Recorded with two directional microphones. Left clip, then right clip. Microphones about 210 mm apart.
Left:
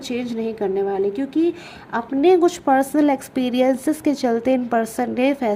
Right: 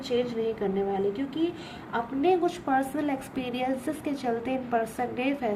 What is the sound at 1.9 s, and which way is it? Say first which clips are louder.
A woman's voice: left 9 dB; 50° left (ahead or behind).